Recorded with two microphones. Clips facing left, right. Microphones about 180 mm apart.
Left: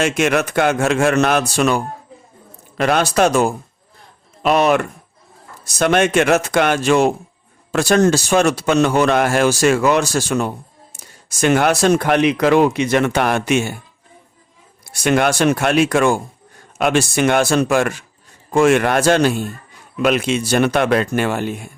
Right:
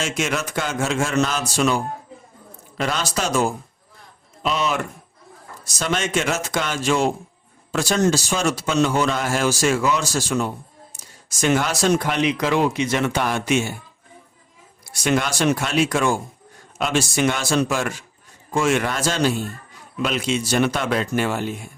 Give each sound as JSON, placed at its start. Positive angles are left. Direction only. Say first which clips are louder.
{"t": 0.0, "sound": "speech", "louder": "left 8 dB", "side_deg": 60}
{"t": 15.0, "sound": "speech", "louder": "left 5 dB", "side_deg": 60}